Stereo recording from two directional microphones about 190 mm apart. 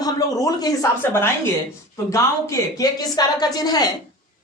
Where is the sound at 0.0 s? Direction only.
20° left (ahead or behind).